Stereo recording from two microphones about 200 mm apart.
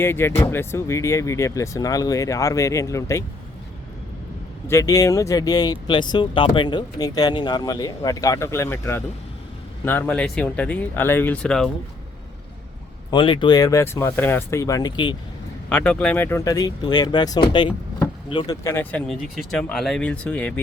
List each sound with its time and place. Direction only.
0.0 s speech: 10° left (ahead or behind)
4.7 s speech: 15° left (ahead or behind)
13.1 s speech: 25° left (ahead or behind)
15.7 s speech: 5° left (ahead or behind)